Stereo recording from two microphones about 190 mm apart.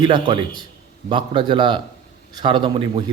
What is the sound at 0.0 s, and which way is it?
A man's voice, 25° right (ahead or behind).